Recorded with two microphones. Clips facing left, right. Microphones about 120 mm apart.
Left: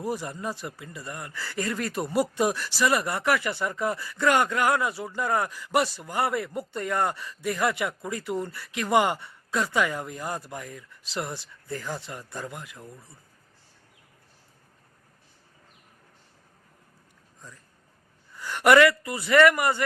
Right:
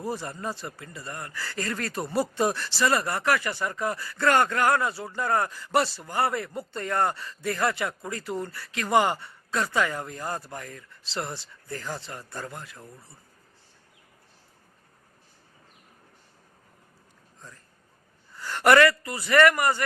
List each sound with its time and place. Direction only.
0.0 s speech: 15° left (ahead or behind)
18.3 s speech: 15° left (ahead or behind)